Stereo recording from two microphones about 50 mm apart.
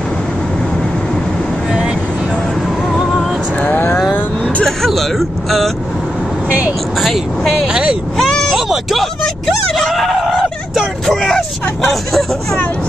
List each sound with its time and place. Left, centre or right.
2.9 s vehicle: centre
3.6 s vehicle: left
4.6 s vehicle: centre
7.6 s vehicle: centre
8.2 s a sound: centre
8.5 s a sound: centre
11.1 s vehicle: centre
11.8 s speech: centre